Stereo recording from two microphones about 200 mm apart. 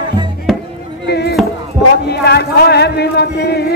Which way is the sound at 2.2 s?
55° left (ahead or behind).